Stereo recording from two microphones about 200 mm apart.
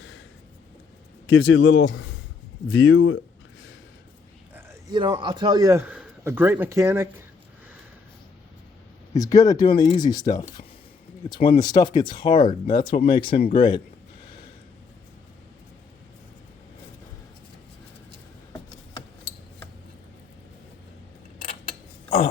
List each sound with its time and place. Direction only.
1.3 s a man's voice: 85° left
4.5 s a man's voice: 15° right (ahead or behind)
9.1 s speech: 15° left (ahead or behind)